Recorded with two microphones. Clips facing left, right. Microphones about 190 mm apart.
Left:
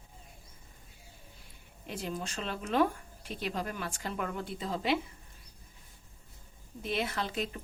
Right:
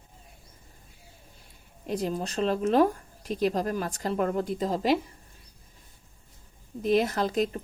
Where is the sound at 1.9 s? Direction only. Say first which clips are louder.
Right 8 dB; 40° right (ahead or behind).